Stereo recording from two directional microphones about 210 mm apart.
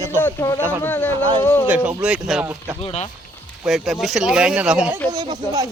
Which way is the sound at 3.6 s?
Centre (ahead or behind).